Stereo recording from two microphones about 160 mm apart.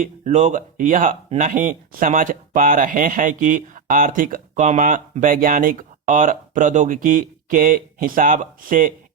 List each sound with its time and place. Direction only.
0.0 s speech: 45° right (ahead or behind)